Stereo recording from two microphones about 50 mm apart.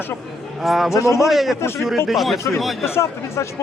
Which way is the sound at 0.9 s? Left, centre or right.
Left.